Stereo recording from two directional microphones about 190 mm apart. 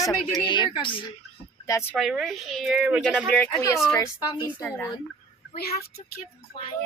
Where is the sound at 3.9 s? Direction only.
15° left (ahead or behind).